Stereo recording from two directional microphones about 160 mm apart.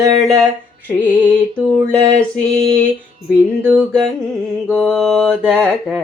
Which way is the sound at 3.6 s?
10° right (ahead or behind).